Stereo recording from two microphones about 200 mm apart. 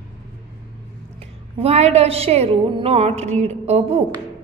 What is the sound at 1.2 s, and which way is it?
A woman's voice, 30° right (ahead or behind).